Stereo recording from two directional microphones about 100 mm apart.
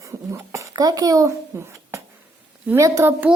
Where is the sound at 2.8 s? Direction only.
30° right (ahead or behind).